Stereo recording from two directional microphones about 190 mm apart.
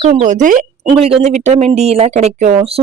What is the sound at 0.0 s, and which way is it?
Speech, 35° right (ahead or behind).